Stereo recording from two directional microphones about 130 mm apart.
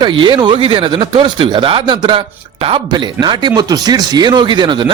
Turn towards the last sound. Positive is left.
turn(degrees=-35)  # may be behind; listen again after turning